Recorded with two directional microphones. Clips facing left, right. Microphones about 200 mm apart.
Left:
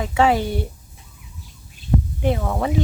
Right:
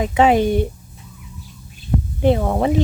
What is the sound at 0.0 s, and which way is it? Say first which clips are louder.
Speech: right 4 dB; 20° right (ahead or behind).